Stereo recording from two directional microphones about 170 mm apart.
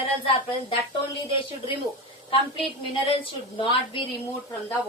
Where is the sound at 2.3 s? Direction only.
30° left (ahead or behind).